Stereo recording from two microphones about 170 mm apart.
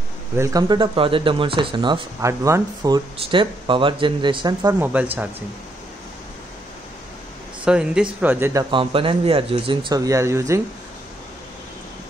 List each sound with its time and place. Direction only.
0.4 s speech: 20° right (ahead or behind)
2.2 s speech: 15° right (ahead or behind)
3.2 s speech: 30° right (ahead or behind)
4.7 s speech: 10° right (ahead or behind)
7.6 s speech: 5° right (ahead or behind)
8.6 s speech: 30° right (ahead or behind)